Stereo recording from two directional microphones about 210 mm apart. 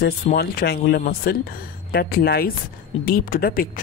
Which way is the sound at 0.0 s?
45° left (ahead or behind).